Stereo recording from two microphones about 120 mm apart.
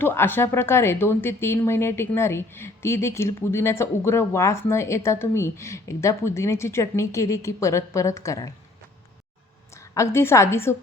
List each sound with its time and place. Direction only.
0.0 s a woman's voice: 20° left (ahead or behind)
9.7 s a woman's voice: 25° left (ahead or behind)